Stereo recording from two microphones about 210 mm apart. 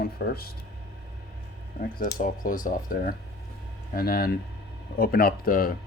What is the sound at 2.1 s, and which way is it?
Speech, 40° left (ahead or behind).